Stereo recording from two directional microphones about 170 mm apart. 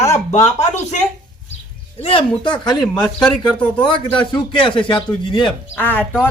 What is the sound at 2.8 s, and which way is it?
Speech, 5° left (ahead or behind).